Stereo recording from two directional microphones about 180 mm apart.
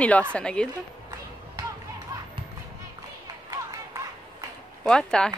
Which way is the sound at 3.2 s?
20° right (ahead or behind).